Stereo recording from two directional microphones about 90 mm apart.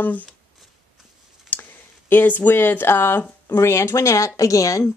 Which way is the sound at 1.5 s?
20° left (ahead or behind).